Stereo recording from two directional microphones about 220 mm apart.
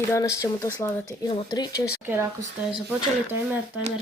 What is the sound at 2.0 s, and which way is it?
Speech, 10° right (ahead or behind).